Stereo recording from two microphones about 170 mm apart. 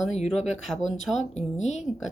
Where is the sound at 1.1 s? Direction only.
45° left (ahead or behind).